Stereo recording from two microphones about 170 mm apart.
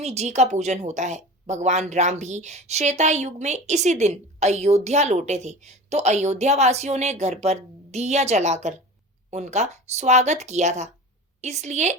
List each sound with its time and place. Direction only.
0.0 s speech: 40° right (ahead or behind)